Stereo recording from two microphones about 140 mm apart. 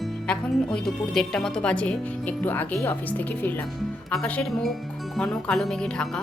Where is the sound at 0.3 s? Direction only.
5° left (ahead or behind).